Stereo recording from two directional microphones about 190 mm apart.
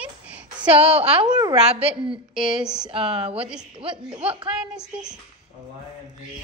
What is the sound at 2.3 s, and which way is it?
A woman's voice, 5° right (ahead or behind).